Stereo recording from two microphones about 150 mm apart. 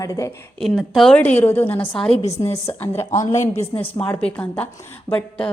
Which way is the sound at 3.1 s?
55° left (ahead or behind).